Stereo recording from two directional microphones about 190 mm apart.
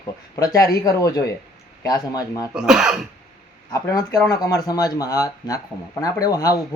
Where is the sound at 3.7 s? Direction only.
15° left (ahead or behind).